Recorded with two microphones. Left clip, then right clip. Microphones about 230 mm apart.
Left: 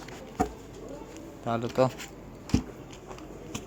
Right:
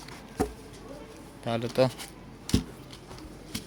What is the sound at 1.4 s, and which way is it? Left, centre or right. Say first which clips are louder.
Speech: even; centre.